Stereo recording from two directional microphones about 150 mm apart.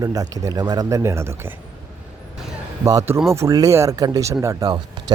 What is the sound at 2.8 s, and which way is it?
Speech, 20° right (ahead or behind).